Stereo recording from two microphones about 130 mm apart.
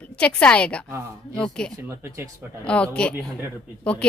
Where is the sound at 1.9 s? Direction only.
20° right (ahead or behind).